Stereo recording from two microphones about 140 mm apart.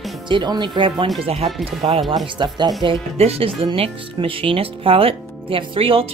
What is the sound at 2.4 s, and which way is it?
Speech, 30° right (ahead or behind).